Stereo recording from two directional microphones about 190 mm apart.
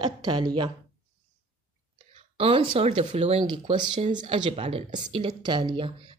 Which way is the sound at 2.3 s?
30° right (ahead or behind).